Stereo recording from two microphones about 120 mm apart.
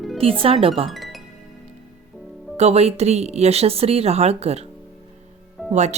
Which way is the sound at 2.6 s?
60° right (ahead or behind).